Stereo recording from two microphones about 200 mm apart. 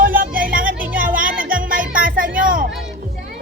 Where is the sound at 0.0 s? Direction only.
45° right (ahead or behind).